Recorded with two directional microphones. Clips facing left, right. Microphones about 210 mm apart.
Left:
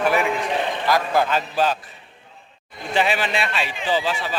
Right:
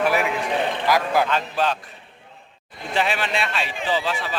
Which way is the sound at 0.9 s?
10° right (ahead or behind).